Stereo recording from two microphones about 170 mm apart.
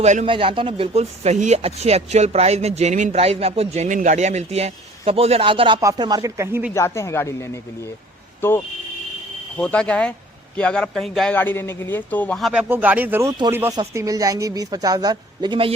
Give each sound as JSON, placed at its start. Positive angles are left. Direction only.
{"t": 0.0, "sound": "speech", "side_deg": -45}
{"t": 0.3, "sound": "a woman's voice", "side_deg": -30}
{"t": 6.7, "sound": "a man's voice", "side_deg": 15}
{"t": 12.6, "sound": "a woman's voice", "side_deg": -10}